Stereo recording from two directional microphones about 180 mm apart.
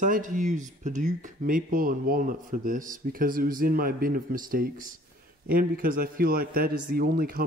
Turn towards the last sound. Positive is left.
turn(degrees=-55)  # may be behind; listen again after turning